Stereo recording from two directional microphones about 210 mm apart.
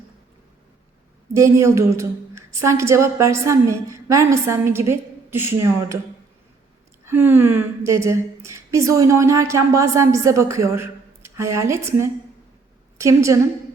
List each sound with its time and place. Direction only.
1.3 s a woman's voice: 15° right (ahead or behind)
7.0 s a woman's voice: 10° right (ahead or behind)